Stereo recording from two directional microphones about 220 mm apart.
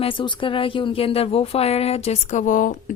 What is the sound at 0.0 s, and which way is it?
Speech, 25° left (ahead or behind).